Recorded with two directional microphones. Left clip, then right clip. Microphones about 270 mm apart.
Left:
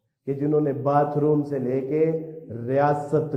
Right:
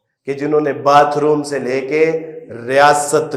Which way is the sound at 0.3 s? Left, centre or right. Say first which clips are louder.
Right 7 dB; centre.